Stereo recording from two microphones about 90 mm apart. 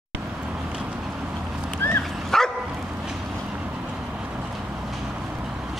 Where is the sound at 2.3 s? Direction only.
5° left (ahead or behind).